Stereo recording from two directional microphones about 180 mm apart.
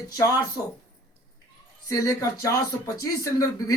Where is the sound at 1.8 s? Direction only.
15° left (ahead or behind).